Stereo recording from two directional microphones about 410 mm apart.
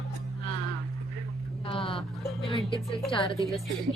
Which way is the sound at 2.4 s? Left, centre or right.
Centre.